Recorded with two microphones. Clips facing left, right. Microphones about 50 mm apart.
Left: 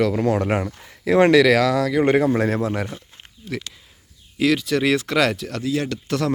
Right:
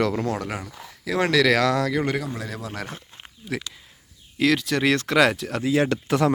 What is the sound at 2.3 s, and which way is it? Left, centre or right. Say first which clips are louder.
Speech: left 12 dB; left.